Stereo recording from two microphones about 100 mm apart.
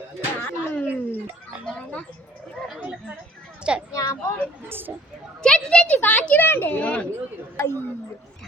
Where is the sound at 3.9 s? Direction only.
35° left (ahead or behind).